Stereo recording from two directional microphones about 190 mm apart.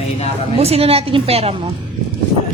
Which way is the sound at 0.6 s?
30° right (ahead or behind).